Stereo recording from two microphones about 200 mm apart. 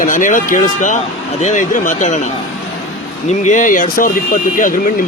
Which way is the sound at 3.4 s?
40° left (ahead or behind).